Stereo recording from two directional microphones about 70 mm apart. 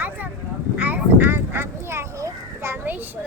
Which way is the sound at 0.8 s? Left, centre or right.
Right.